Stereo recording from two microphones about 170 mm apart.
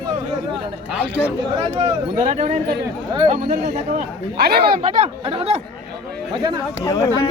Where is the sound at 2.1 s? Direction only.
45° right (ahead or behind).